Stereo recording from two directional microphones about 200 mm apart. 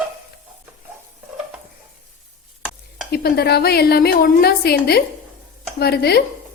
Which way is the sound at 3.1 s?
50° left (ahead or behind).